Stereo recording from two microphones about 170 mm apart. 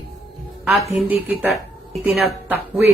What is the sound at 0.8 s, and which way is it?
Speech, 35° left (ahead or behind).